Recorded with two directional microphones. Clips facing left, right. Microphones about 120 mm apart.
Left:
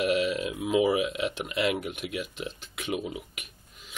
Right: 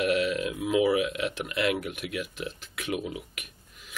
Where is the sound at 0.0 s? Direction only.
10° left (ahead or behind).